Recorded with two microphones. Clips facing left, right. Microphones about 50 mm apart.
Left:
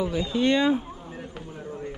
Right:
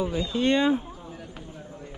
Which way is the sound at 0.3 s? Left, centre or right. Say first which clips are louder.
Left 1 dB; right.